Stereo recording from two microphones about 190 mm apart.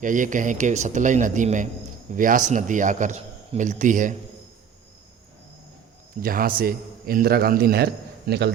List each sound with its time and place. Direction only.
0.0 s a man's voice: 45° right (ahead or behind)
6.2 s a man's voice: 50° right (ahead or behind)